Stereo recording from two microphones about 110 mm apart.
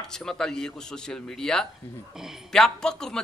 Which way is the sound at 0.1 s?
5° left (ahead or behind).